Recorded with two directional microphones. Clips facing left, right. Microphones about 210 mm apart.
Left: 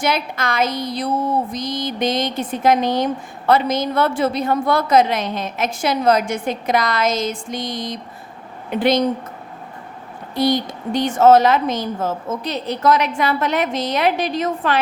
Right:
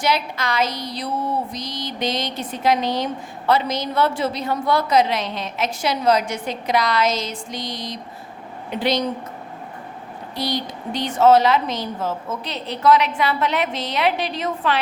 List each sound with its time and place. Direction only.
0.0 s speech: 50° left (ahead or behind)
10.3 s speech: 50° left (ahead or behind)